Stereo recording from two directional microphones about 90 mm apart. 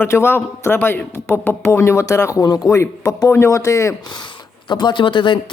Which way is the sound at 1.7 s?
35° left (ahead or behind).